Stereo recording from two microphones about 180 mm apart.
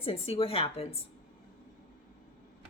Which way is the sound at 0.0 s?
30° left (ahead or behind).